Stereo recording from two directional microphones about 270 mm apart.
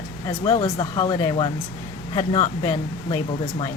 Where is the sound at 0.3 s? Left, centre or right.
Centre.